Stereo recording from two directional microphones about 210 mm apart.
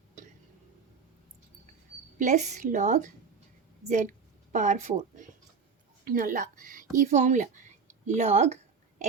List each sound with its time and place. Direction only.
2.1 s a woman's voice: 35° right (ahead or behind)